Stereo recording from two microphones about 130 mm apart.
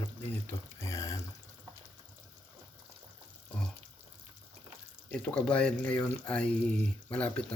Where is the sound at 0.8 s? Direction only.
25° left (ahead or behind).